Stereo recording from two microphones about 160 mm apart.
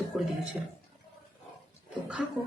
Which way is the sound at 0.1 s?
Centre (ahead or behind).